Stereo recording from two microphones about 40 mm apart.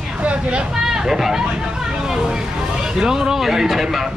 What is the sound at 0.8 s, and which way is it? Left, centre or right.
Speech, centre.